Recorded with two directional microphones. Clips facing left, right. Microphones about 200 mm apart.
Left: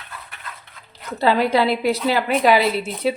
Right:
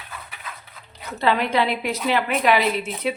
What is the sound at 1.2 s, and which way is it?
A woman's voice, 35° left (ahead or behind).